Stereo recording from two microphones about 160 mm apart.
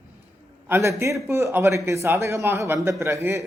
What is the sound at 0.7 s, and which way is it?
Speech, 15° right (ahead or behind).